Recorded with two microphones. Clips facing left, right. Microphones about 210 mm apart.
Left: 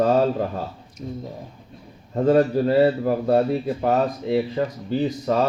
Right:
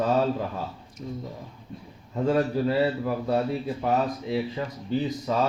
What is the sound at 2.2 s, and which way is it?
A man's voice, 50° left (ahead or behind).